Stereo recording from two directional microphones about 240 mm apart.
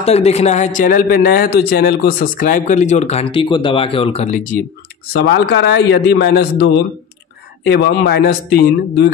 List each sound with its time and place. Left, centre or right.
0.0 s a man's voice: left
5.1 s a man's voice: left